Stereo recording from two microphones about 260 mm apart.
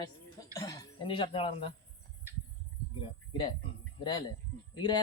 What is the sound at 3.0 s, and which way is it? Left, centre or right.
Speech, centre.